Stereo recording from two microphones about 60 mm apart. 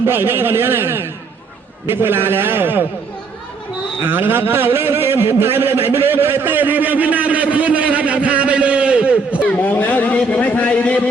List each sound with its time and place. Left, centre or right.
0.0 s a man's voice: right
4.0 s a man's voice: right
9.5 s a sound: left